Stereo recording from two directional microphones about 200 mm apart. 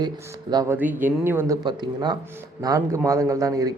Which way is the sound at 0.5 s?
15° right (ahead or behind).